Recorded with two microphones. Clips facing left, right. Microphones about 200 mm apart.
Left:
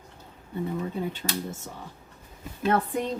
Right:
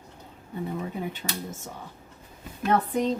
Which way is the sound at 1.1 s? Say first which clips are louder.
Left 2 dB; 15° right (ahead or behind).